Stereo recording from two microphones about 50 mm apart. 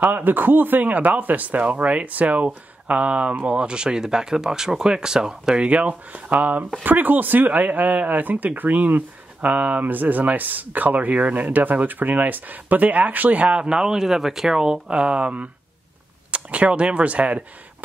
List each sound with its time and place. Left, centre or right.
0.0 s speech: right